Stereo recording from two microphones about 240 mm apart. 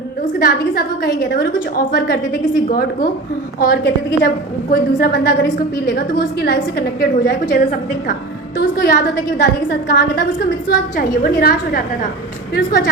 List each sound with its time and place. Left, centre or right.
0.3 s a woman's voice: left